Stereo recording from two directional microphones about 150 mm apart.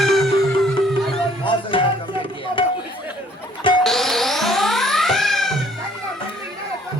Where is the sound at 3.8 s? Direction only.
Centre (ahead or behind).